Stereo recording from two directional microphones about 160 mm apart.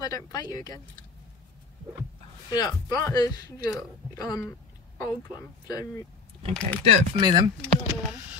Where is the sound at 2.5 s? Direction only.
25° left (ahead or behind).